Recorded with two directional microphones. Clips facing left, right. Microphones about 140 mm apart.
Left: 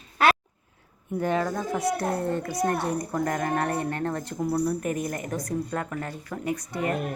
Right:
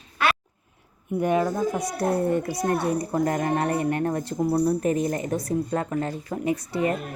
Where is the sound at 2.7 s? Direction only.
10° right (ahead or behind).